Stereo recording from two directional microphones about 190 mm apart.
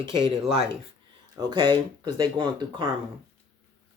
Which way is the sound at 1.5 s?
25° right (ahead or behind).